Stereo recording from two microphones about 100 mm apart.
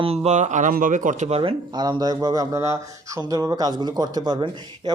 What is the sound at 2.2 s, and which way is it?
A man's voice, 40° right (ahead or behind).